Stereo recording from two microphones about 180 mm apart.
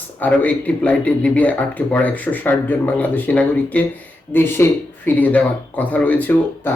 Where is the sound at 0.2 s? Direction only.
5° left (ahead or behind).